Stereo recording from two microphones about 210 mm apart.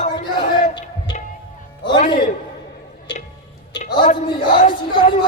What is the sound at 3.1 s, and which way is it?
Tick-tock, 20° left (ahead or behind).